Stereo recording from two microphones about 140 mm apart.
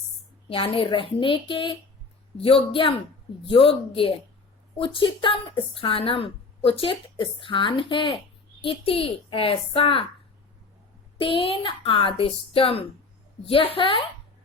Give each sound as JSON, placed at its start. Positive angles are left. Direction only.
{"t": 0.4, "sound": "a woman's voice", "side_deg": 40}
{"t": 11.2, "sound": "a woman's voice", "side_deg": 40}